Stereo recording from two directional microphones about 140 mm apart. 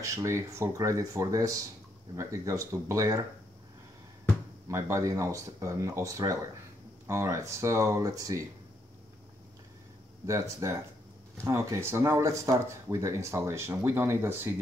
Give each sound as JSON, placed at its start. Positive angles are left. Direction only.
{"t": 0.0, "sound": "speech", "side_deg": -20}
{"t": 4.6, "sound": "speech", "side_deg": -20}
{"t": 10.6, "sound": "speech", "side_deg": -20}